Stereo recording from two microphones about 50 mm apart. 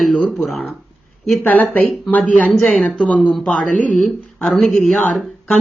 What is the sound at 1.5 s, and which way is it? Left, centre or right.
Speech, left.